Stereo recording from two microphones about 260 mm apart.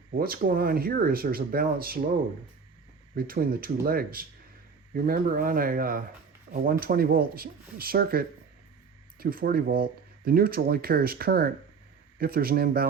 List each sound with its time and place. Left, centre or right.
0.2 s speech: right
3.2 s speech: right